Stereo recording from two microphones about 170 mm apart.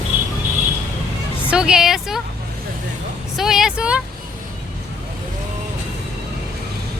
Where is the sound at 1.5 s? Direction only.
5° right (ahead or behind).